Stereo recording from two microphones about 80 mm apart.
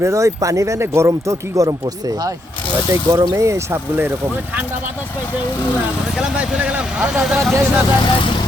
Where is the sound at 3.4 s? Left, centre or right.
Right.